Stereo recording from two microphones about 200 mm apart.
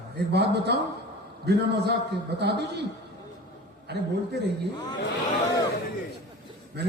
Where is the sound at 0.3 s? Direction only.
55° right (ahead or behind).